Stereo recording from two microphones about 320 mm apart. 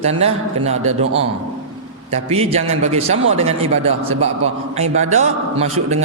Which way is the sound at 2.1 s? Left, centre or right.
Centre.